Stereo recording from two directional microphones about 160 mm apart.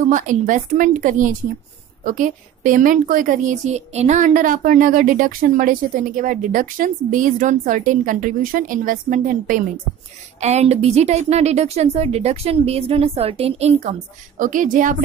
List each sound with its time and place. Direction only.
0.0 s a woman's voice: 55° right (ahead or behind)
10.4 s a woman's voice: 45° right (ahead or behind)
14.4 s a woman's voice: 55° right (ahead or behind)